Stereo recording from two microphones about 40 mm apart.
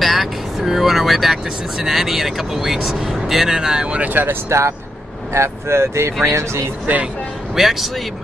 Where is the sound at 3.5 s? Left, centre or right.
Centre.